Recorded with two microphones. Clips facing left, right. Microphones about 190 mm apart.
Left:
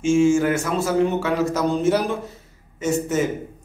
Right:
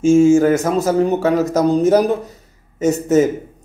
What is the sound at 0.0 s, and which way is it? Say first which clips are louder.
A man's voice: right 6 dB; 40° right (ahead or behind).